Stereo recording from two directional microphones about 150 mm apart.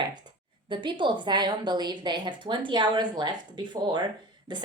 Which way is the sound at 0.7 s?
35° right (ahead or behind).